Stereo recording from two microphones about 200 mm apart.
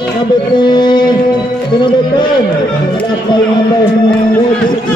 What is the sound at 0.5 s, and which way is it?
Music, 20° left (ahead or behind).